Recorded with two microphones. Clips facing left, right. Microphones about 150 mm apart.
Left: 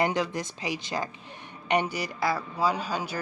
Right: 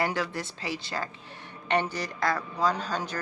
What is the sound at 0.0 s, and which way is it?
Speech, 20° left (ahead or behind).